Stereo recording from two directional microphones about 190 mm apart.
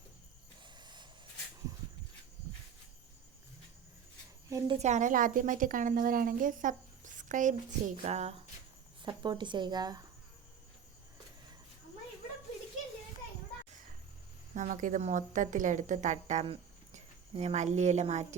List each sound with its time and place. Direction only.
0.8 s a sound: 20° right (ahead or behind)
4.4 s a woman's voice: 15° right (ahead or behind)
4.8 s a woman's voice: 40° right (ahead or behind)
9.0 s speech: 25° right (ahead or behind)
14.5 s a woman's voice: 40° right (ahead or behind)